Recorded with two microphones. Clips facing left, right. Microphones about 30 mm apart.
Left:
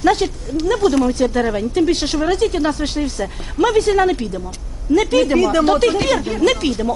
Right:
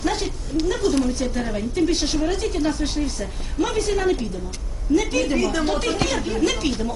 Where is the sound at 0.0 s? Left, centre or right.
Left.